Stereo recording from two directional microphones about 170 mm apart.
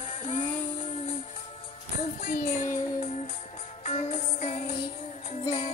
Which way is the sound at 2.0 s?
45° left (ahead or behind).